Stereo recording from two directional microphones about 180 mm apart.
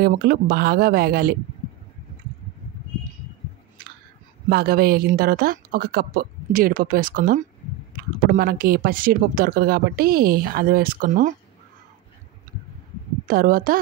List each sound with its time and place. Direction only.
0.0 s speech: 55° right (ahead or behind)
4.5 s speech: 60° right (ahead or behind)
13.3 s a woman's voice: 50° right (ahead or behind)